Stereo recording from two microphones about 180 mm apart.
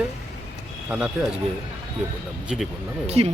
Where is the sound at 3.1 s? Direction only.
35° right (ahead or behind).